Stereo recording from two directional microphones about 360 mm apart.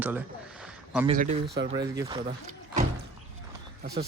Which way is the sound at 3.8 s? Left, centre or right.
Right.